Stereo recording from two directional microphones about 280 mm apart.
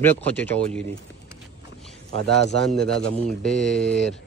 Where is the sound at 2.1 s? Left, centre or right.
Right.